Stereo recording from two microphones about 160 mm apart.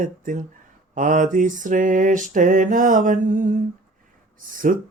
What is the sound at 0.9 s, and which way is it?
Mantra, 50° right (ahead or behind).